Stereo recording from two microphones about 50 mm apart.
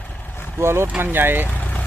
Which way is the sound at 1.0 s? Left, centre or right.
Right.